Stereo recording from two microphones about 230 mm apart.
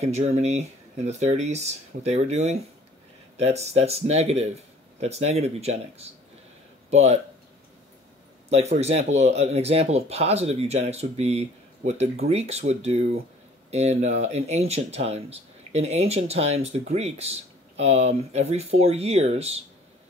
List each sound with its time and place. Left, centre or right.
0.0 s speech: right
8.5 s speech: right